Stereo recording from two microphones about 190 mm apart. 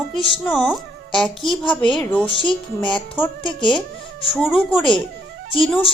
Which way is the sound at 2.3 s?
25° left (ahead or behind).